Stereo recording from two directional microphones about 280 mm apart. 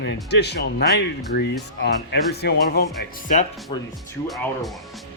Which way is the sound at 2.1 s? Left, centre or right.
Left.